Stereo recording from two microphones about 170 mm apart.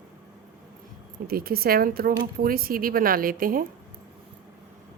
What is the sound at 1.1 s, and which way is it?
A woman's voice, 60° right (ahead or behind).